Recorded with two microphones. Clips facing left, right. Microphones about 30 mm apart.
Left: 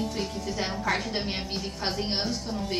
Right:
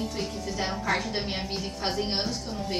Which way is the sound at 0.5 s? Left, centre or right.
Centre.